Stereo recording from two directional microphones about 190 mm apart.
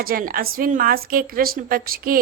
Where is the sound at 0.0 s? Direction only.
50° right (ahead or behind).